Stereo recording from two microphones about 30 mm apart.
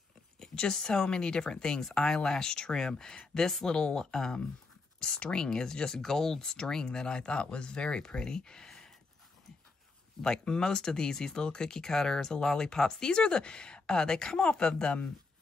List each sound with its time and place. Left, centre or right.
0.4 s speech: left
8.6 s a sound: centre
10.2 s speech: left